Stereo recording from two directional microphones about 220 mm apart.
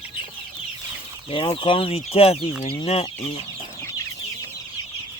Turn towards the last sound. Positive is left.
turn(degrees=25)  # may be behind; listen again after turning